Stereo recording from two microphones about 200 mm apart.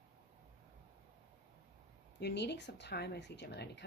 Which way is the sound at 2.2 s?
55° left (ahead or behind).